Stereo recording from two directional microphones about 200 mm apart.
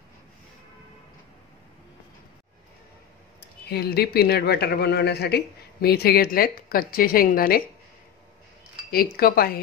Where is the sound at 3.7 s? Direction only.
50° left (ahead or behind).